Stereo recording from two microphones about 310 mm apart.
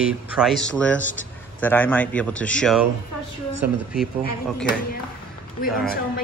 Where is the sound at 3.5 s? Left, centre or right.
Right.